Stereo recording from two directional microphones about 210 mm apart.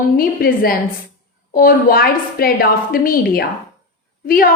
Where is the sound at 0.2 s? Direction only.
45° left (ahead or behind).